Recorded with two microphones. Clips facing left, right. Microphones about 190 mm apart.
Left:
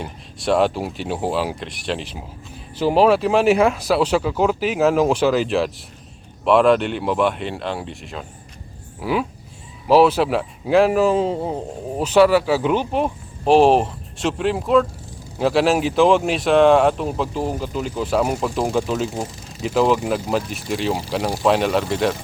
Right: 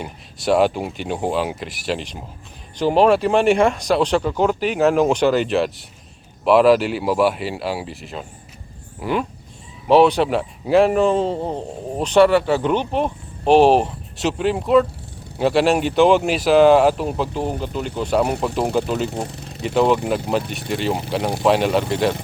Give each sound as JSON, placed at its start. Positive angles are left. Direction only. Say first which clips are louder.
{"t": 0.0, "sound": "a man's voice", "louder": "right 1 dB", "side_deg": 0}
{"t": 19.2, "sound": "speech", "louder": "right 1 dB", "side_deg": -65}
{"t": 19.6, "sound": "a man's voice", "louder": "right 1 dB", "side_deg": 0}